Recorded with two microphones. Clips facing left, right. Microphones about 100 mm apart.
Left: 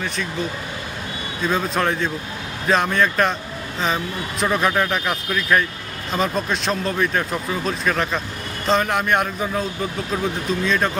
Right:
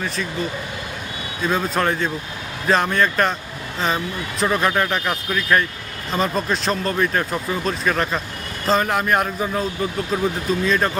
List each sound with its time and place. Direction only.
1.5 s speech: centre (ahead or behind)